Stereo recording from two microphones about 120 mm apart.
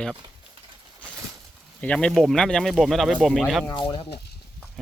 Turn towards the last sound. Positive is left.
turn(degrees=40)  # may be behind; listen again after turning